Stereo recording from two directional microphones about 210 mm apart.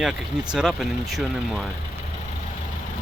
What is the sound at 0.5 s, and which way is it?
Speech, centre (ahead or behind).